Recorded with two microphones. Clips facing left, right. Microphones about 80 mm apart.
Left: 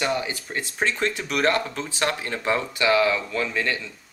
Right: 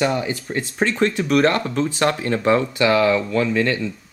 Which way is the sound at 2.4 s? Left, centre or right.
Centre.